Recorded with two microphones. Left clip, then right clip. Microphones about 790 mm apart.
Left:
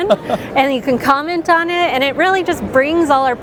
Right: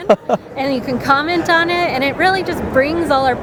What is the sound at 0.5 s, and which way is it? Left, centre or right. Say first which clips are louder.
Speech: left 5 dB; left.